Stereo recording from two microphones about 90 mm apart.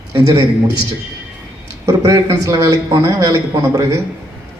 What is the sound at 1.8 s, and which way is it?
Speech, 35° right (ahead or behind).